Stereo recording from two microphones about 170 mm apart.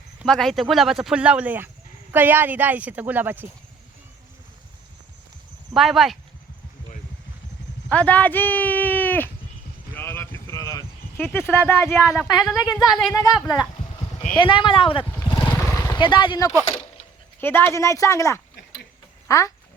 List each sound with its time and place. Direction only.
0.2 s speech: centre (ahead or behind)
5.7 s speech: centre (ahead or behind)
7.9 s speech: 10° left (ahead or behind)
9.9 s a sound: 15° left (ahead or behind)
12.1 s speech: centre (ahead or behind)
13.1 s speech: 20° left (ahead or behind)
15.4 s vehicle: 15° left (ahead or behind)
17.4 s speech: 15° left (ahead or behind)